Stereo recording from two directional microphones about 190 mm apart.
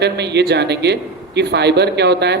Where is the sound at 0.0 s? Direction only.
60° right (ahead or behind).